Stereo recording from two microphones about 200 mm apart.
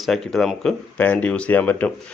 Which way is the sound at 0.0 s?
Centre (ahead or behind).